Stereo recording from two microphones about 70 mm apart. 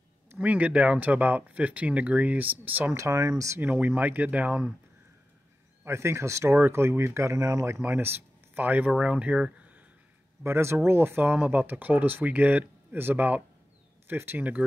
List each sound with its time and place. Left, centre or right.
0.4 s speech: right
2.9 s speech: right
3.6 s speech: right
5.9 s speech: right
7.3 s speech: right
7.8 s speech: right; by 9.5 s centre
10.4 s speech: right